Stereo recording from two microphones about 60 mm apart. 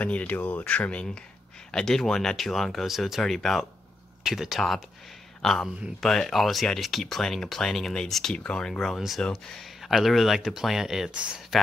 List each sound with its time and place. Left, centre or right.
0.0 s speech: left
1.7 s speech: centre
4.2 s speech: centre
5.4 s speech: centre